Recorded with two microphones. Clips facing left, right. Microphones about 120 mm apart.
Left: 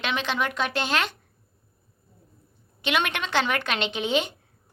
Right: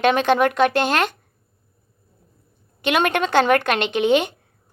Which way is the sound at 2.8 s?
50° right (ahead or behind).